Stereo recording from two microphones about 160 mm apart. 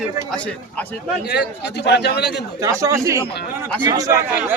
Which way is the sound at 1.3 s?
90° left.